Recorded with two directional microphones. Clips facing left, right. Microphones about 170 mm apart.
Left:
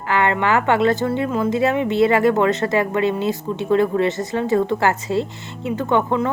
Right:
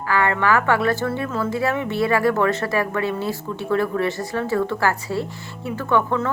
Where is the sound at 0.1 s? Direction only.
20° left (ahead or behind).